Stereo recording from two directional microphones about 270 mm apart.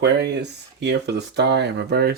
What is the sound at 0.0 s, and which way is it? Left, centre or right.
Speech, right.